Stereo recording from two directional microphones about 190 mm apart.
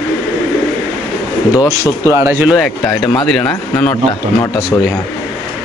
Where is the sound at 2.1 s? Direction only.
15° right (ahead or behind).